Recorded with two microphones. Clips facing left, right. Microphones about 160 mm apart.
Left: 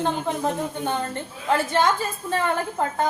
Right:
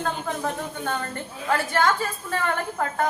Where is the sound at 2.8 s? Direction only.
20° left (ahead or behind).